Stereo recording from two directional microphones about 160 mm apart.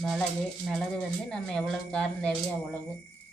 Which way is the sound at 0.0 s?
Centre (ahead or behind).